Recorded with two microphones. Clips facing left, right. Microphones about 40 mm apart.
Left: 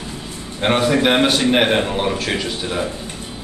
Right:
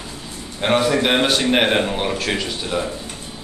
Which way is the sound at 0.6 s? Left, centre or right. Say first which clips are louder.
Left 1 dB; centre.